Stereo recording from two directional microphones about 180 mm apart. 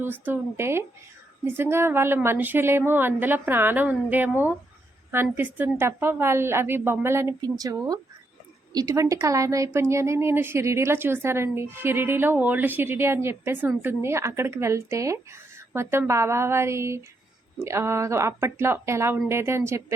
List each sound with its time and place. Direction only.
0.0 s a woman's voice: 10° right (ahead or behind)